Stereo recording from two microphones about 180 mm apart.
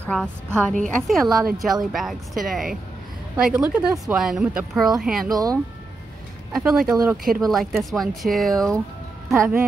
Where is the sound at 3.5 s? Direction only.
15° right (ahead or behind).